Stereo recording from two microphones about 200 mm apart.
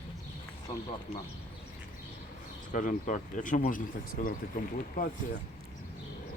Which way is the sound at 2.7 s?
40° left (ahead or behind).